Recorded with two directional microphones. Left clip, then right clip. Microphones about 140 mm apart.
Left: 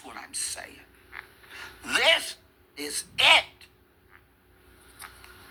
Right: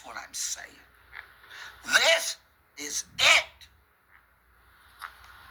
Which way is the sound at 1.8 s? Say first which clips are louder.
Even; 75° right (ahead or behind).